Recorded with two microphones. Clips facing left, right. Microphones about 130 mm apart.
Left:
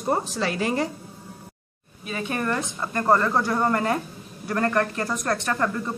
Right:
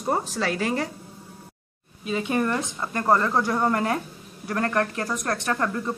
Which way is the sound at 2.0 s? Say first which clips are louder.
Right 4 dB; 20° right (ahead or behind).